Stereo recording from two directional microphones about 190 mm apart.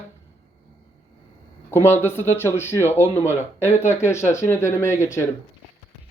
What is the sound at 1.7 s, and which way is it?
Speech, 10° left (ahead or behind).